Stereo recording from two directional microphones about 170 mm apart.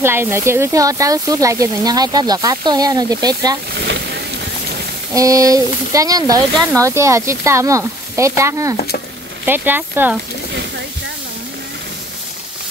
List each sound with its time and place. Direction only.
0.0 s speech: 15° right (ahead or behind)
3.7 s boat: 85° right
5.1 s speech: 20° right (ahead or behind)